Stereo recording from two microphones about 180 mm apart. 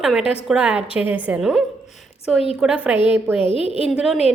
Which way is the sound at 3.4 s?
30° left (ahead or behind).